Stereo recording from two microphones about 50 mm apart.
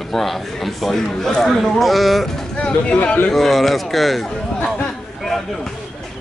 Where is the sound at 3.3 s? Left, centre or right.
Centre.